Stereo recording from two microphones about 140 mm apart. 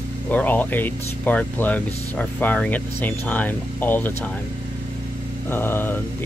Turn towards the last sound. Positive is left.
turn(degrees=15)  # may be behind; listen again after turning